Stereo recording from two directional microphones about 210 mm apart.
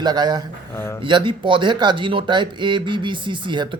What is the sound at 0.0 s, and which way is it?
Speech, 20° right (ahead or behind).